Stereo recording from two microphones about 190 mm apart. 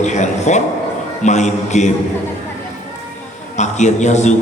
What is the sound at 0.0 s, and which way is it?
A man's voice, 40° left (ahead or behind).